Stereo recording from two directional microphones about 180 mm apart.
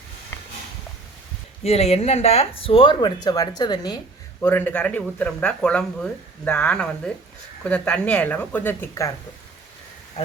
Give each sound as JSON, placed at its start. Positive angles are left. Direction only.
{"t": 1.6, "sound": "speech", "side_deg": 35}
{"t": 4.4, "sound": "speech", "side_deg": 10}